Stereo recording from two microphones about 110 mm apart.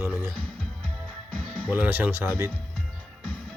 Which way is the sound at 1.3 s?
10° left (ahead or behind).